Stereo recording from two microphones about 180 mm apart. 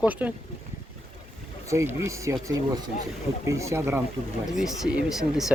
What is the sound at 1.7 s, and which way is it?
Speech, 15° right (ahead or behind).